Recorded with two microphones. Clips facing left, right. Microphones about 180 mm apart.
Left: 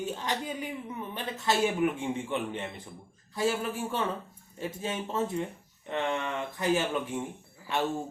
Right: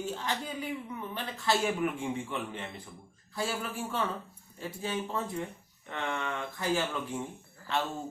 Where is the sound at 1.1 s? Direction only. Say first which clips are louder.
Left 1 dB; 20° left (ahead or behind).